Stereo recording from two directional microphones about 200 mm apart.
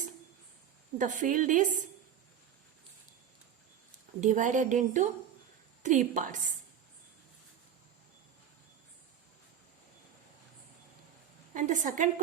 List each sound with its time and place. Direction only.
0.9 s speech: 40° right (ahead or behind)
4.2 s speech: 40° right (ahead or behind)
11.5 s speech: 40° right (ahead or behind)